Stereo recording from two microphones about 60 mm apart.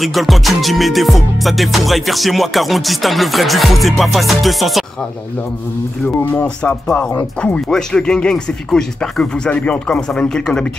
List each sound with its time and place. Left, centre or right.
0.0 s music: centre
6.4 s speech: centre
7.2 s speech: left
7.7 s speech: centre